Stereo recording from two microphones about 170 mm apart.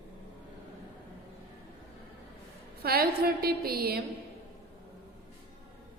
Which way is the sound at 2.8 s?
65° right (ahead or behind).